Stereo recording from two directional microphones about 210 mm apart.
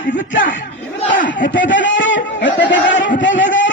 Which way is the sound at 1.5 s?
60° left (ahead or behind).